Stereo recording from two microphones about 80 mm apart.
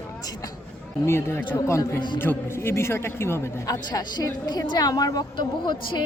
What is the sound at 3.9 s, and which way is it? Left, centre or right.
A woman's voice, left.